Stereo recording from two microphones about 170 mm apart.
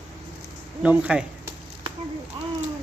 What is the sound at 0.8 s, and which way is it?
Speech, 5° right (ahead or behind).